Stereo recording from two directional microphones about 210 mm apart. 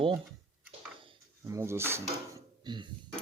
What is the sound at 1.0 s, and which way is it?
Drawer open or close, 20° right (ahead or behind).